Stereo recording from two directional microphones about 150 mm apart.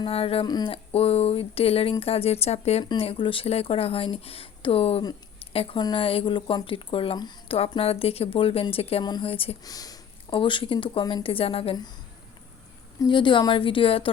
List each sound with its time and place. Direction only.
0.0 s speech: 40° left (ahead or behind)
0.4 s speech: 30° left (ahead or behind)
9.6 s speech: 25° left (ahead or behind)
13.0 s speech: 30° left (ahead or behind)